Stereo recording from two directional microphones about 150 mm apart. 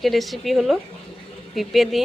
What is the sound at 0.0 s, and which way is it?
Speech, centre (ahead or behind).